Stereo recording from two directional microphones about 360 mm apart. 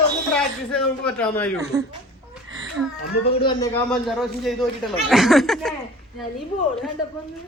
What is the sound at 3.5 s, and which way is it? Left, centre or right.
Speech, centre.